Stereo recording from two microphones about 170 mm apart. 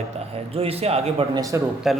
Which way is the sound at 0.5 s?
35° right (ahead or behind).